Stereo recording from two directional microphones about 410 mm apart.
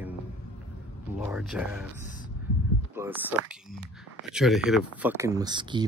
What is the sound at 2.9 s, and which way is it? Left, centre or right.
Speech, centre.